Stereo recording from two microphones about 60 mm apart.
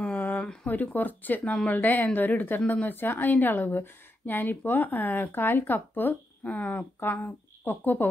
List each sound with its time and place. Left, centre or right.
0.0 s a sound: left
0.7 s a woman's voice: left
7.0 s speech: left